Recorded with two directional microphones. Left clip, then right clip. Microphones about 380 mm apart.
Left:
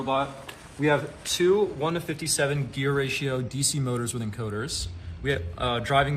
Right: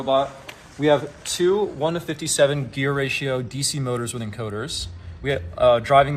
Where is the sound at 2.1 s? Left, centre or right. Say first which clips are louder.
Right 7 dB; centre.